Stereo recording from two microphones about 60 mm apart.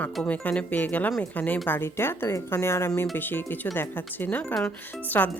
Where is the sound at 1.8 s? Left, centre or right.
Left.